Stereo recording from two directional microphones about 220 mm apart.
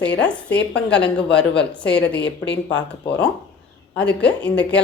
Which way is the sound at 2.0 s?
50° left (ahead or behind).